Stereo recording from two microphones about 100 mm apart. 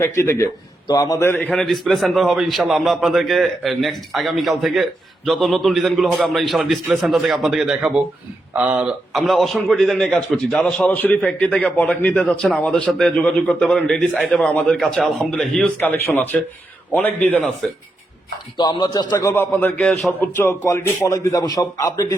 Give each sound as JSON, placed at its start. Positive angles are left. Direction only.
{"t": 0.0, "sound": "a man's voice", "side_deg": 25}
{"t": 1.2, "sound": "speech", "side_deg": 20}
{"t": 1.5, "sound": "a man's voice", "side_deg": 0}
{"t": 9.2, "sound": "a man's voice", "side_deg": 0}
{"t": 15.8, "sound": "a man's voice", "side_deg": 20}
{"t": 17.6, "sound": "a man's voice", "side_deg": 5}
{"t": 18.5, "sound": "speech", "side_deg": 45}
{"t": 19.4, "sound": "a man's voice", "side_deg": 20}
{"t": 20.4, "sound": "a man's voice", "side_deg": 30}